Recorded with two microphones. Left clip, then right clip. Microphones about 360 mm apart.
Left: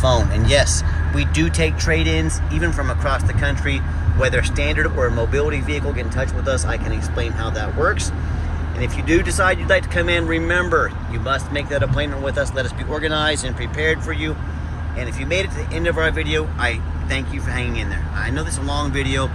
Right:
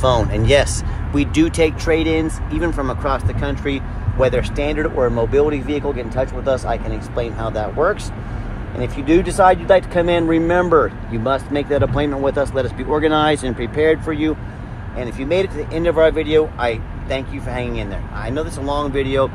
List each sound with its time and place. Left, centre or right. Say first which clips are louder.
0.1 s speech: right 3 dB; centre